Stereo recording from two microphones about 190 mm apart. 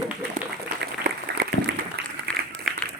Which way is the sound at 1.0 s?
55° right (ahead or behind).